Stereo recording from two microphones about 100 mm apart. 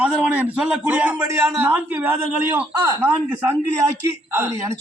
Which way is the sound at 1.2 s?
25° right (ahead or behind).